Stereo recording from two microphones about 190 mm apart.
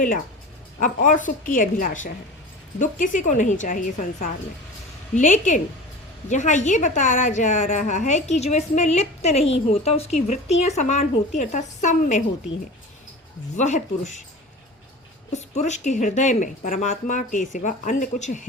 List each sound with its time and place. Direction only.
0.8 s a woman's voice: 45° left (ahead or behind)
13.6 s a woman's voice: 40° left (ahead or behind)
15.3 s a woman's voice: 35° left (ahead or behind)